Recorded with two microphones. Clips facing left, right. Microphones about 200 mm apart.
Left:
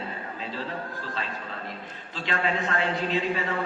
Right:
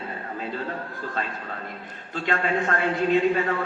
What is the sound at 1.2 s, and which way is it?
A man's voice, 50° right (ahead or behind).